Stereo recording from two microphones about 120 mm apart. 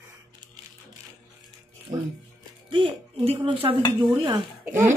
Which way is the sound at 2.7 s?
45° right (ahead or behind).